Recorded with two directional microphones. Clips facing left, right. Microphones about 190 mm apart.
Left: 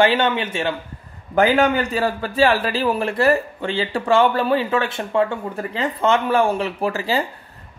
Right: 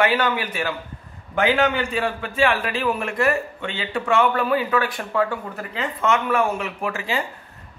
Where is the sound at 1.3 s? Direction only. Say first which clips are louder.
Left 4 dB; 40° left (ahead or behind).